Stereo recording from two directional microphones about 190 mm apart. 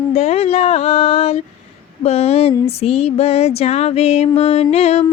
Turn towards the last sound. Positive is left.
turn(degrees=35)  # may be behind; listen again after turning